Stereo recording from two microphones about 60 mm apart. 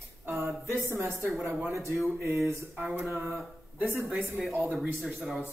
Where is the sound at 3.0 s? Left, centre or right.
Right.